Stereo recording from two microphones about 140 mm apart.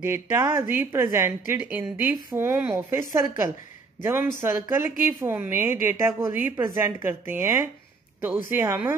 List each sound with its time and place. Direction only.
0.0 s a woman's voice: 15° right (ahead or behind)